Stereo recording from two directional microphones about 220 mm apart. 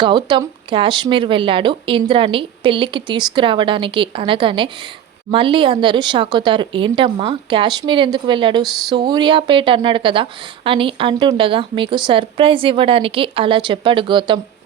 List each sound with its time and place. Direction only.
0.0 s a woman's voice: 20° right (ahead or behind)